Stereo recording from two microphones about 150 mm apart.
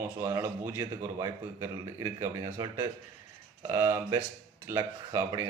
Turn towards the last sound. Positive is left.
turn(degrees=-20)  # may be behind; listen again after turning